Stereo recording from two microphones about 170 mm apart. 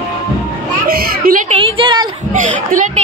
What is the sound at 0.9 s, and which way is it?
Children playing, 55° right (ahead or behind).